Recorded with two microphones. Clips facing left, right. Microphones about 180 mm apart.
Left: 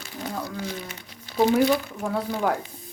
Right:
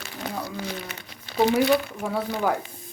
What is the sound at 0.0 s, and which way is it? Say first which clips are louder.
Crumpling: even; 70° right (ahead or behind).